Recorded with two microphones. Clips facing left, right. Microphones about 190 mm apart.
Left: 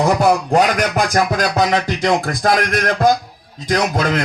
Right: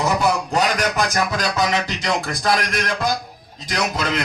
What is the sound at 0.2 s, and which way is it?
A man's voice, 50° left (ahead or behind).